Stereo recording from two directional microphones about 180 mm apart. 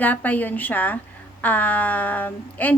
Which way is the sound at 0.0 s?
10° left (ahead or behind).